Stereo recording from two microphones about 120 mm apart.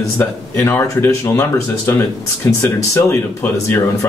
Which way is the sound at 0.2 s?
15° left (ahead or behind).